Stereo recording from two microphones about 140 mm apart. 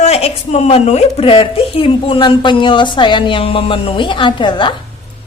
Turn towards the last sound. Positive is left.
turn(degrees=35)  # may be behind; listen again after turning